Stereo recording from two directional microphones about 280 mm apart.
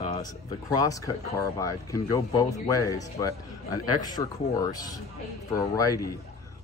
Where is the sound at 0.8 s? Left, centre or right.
Centre.